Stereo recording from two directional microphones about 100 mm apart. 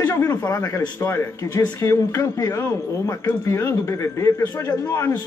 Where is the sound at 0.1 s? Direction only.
35° left (ahead or behind).